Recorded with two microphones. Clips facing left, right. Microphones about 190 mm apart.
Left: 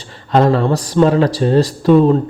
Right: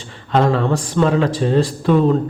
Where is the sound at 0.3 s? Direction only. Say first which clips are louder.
Left 3 dB; 35° left (ahead or behind).